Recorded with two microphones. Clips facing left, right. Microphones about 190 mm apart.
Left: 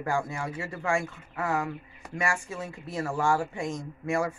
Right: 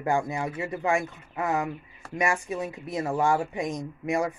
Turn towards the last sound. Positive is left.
turn(degrees=-20)  # may be behind; listen again after turning